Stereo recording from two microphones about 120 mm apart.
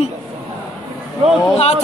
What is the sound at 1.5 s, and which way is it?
Speech, 60° left (ahead or behind).